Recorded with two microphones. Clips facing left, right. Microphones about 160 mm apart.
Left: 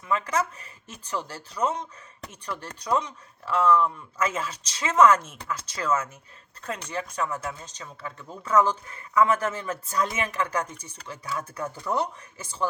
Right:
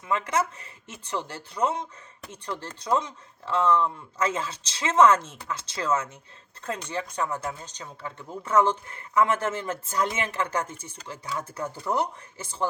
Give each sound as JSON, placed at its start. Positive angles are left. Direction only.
{"t": 0.0, "sound": "speech", "side_deg": -25}